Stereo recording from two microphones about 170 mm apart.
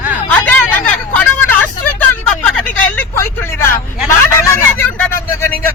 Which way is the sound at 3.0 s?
15° left (ahead or behind).